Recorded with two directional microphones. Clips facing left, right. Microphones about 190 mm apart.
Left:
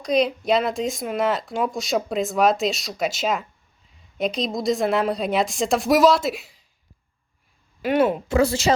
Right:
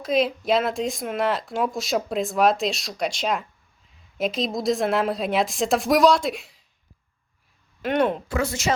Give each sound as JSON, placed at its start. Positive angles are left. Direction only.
{"t": 0.0, "sound": "speech", "side_deg": 0}
{"t": 7.8, "sound": "speech", "side_deg": 5}
{"t": 8.3, "sound": "a woman's voice", "side_deg": 35}